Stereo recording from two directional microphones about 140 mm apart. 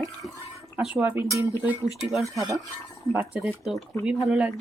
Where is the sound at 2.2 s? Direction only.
25° right (ahead or behind).